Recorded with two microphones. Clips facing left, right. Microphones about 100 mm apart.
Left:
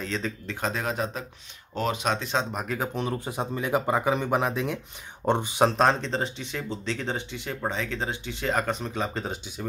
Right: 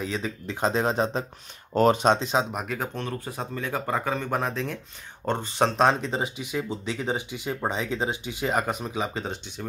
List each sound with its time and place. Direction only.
0.0 s speech: 10° right (ahead or behind)
0.6 s speech: 25° right (ahead or behind)
1.7 s speech: 45° right (ahead or behind)
2.0 s speech: 20° right (ahead or behind)
2.5 s speech: centre (ahead or behind)
3.0 s speech: 15° left (ahead or behind)